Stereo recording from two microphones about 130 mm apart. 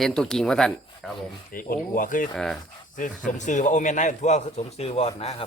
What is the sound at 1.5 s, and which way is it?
Speech, 90° left.